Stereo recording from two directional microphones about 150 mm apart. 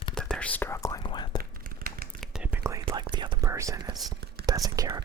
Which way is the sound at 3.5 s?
20° right (ahead or behind).